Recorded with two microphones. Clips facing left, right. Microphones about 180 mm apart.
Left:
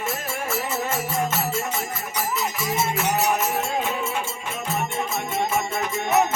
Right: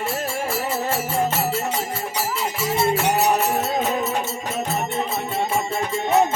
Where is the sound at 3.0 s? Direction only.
35° right (ahead or behind).